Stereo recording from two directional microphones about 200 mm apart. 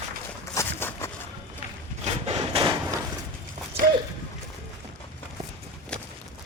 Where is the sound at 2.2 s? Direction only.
30° right (ahead or behind).